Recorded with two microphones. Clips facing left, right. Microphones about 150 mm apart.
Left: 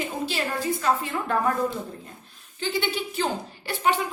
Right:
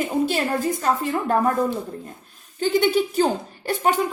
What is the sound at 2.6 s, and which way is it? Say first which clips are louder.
Speech: right 9 dB; 45° right (ahead or behind).